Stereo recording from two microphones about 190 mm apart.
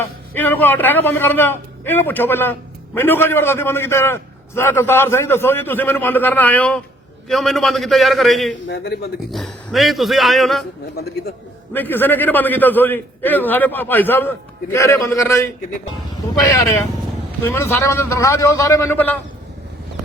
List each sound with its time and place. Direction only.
0.3 s a man's voice: 10° left (ahead or behind)
8.7 s speech: 60° left (ahead or behind)
9.3 s a man's voice: centre (ahead or behind)
11.7 s a man's voice: 10° left (ahead or behind)